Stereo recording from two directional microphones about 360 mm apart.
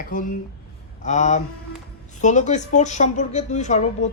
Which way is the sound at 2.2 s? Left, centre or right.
Centre.